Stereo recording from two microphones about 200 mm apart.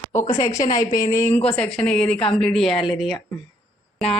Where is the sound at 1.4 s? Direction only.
5° left (ahead or behind).